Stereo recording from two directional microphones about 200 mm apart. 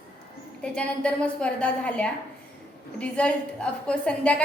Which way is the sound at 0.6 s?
5° left (ahead or behind).